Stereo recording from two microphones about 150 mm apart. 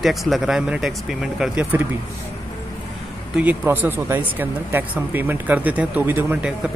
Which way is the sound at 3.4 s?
10° right (ahead or behind).